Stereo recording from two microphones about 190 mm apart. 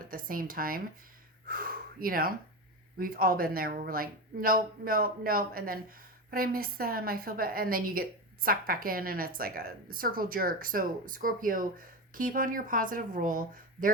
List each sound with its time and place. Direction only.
0.1 s a woman's voice: 50° right (ahead or behind)